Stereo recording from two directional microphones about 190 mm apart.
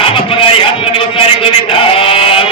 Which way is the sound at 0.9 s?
25° left (ahead or behind).